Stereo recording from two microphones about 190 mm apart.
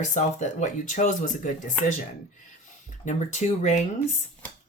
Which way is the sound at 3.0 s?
40° left (ahead or behind).